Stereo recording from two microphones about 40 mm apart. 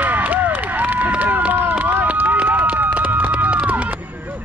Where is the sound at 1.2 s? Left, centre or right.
Right.